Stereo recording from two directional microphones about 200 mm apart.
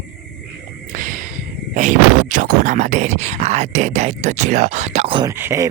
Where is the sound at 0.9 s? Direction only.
40° right (ahead or behind).